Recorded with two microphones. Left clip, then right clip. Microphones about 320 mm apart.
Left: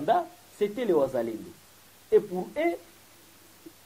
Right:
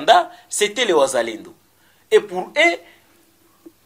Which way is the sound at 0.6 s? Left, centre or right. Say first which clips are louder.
Right 9 dB; centre.